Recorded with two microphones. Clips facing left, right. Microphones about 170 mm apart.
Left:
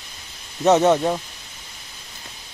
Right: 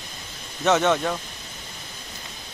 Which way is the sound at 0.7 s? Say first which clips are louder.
Left 5 dB; 30° left (ahead or behind).